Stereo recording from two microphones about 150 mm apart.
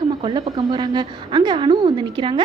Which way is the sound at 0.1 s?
30° right (ahead or behind).